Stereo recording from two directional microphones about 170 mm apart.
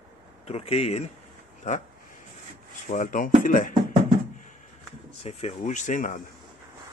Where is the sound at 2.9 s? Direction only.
50° left (ahead or behind).